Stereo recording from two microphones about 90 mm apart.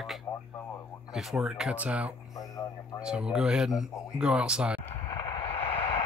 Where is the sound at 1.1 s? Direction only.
5° right (ahead or behind).